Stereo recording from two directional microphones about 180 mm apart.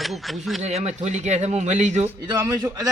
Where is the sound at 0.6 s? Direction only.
40° right (ahead or behind).